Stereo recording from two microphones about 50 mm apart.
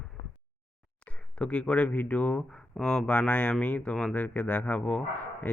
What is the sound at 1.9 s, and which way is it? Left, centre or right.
Speech, left.